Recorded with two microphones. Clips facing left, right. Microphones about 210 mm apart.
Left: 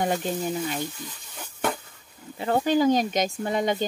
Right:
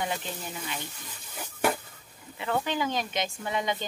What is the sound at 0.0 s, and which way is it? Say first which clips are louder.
Speech: left 8 dB; 45° left (ahead or behind).